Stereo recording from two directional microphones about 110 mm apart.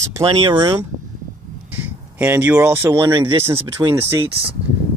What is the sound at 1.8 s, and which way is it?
Speech, 20° right (ahead or behind).